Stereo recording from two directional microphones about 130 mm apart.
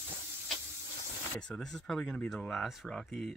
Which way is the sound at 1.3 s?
5° left (ahead or behind).